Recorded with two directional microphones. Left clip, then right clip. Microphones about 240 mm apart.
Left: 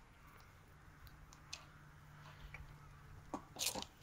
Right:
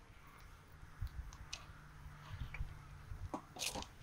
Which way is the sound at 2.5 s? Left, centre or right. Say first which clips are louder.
Right 3 dB; centre.